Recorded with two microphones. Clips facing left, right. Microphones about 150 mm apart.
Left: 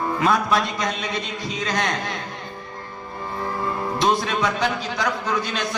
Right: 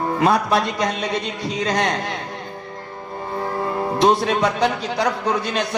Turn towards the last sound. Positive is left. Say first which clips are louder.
# right 4 dB
turn(degrees=-35)  # may be behind; listen again after turning